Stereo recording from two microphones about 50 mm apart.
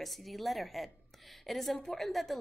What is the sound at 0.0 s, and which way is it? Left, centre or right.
A woman's voice, centre.